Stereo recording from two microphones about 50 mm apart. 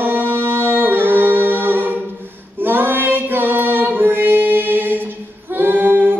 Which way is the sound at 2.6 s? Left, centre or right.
Right.